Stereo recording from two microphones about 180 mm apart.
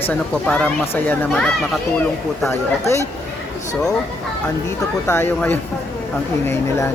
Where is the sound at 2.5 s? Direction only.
15° left (ahead or behind).